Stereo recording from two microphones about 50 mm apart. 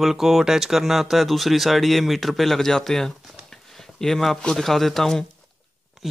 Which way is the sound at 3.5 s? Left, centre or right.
Centre.